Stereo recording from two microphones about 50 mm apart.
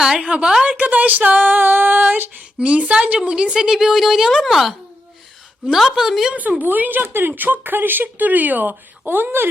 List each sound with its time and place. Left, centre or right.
0.0 s a woman's voice: centre
0.8 s speech: right
2.6 s a woman's voice: right; by 4.7 s centre
6.0 s a woman's voice: centre
6.3 s speech: right